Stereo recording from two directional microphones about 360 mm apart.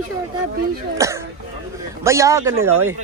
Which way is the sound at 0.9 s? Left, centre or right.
Centre.